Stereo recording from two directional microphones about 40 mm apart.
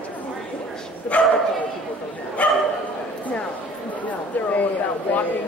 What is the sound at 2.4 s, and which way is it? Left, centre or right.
Speech, left.